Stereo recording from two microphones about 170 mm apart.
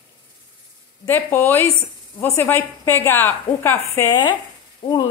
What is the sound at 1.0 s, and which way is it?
A woman's voice, 10° left (ahead or behind).